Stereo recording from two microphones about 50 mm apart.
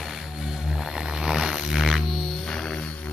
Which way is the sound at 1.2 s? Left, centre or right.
Centre.